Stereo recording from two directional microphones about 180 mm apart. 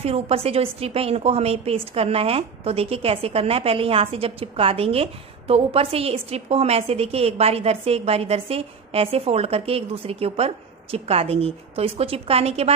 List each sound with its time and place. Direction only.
0.0 s a woman's voice: 35° right (ahead or behind)